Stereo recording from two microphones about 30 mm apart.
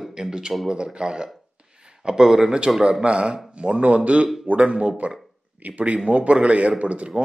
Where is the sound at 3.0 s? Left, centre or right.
Right.